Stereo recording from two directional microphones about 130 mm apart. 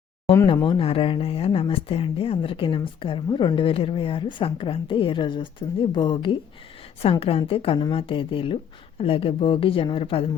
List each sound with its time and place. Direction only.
0.4 s speech: 40° left (ahead or behind)
7.0 s a woman's voice: 50° left (ahead or behind)